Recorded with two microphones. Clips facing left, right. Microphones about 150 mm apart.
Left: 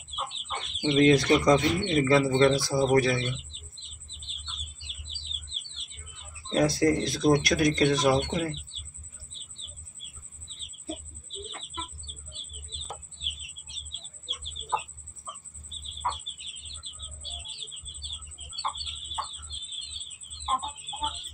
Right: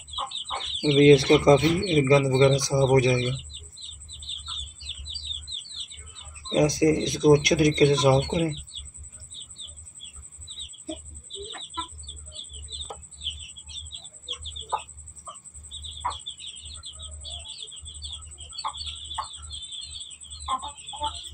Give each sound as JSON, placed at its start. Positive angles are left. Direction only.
{"t": 0.7, "sound": "speech", "side_deg": -20}
{"t": 6.5, "sound": "speech", "side_deg": -15}